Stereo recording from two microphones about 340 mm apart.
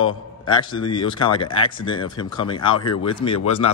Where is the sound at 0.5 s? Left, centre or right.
Centre.